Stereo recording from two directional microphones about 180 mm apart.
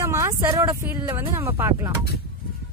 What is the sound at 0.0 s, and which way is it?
Speech, 15° right (ahead or behind).